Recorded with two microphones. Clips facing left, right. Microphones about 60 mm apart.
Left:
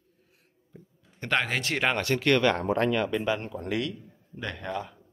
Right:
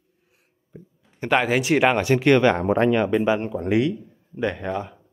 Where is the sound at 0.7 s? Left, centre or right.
Right.